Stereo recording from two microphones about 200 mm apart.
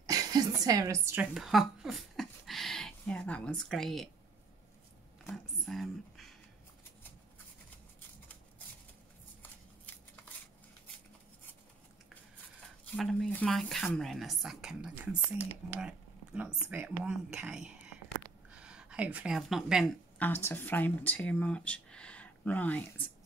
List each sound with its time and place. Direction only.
0.0 s a sound: 20° right (ahead or behind)
1.3 s speech: centre (ahead or behind)
5.2 s speech: centre (ahead or behind)
12.9 s speech: centre (ahead or behind)
20.2 s speech: 10° left (ahead or behind)